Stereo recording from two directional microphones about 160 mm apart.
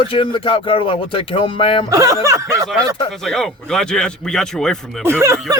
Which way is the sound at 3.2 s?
5° left (ahead or behind).